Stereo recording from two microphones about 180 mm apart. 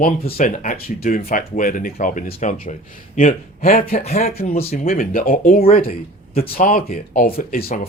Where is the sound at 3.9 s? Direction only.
35° left (ahead or behind).